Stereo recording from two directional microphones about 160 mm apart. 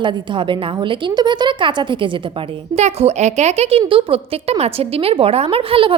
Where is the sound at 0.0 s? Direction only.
30° right (ahead or behind).